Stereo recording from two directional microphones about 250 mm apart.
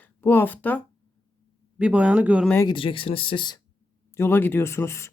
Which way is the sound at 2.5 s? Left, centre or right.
Centre.